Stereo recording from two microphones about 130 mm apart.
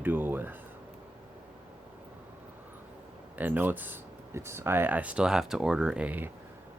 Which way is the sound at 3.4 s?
15° right (ahead or behind).